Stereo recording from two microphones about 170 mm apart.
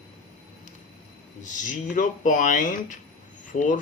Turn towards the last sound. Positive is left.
turn(degrees=45)  # may be behind; listen again after turning